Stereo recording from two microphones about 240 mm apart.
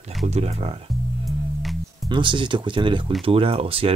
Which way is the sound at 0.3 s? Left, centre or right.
Right.